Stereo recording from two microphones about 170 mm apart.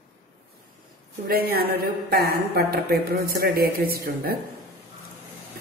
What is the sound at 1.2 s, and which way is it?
A woman's voice, 60° right (ahead or behind).